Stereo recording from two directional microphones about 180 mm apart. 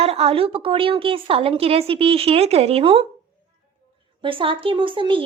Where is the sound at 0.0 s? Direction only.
35° right (ahead or behind).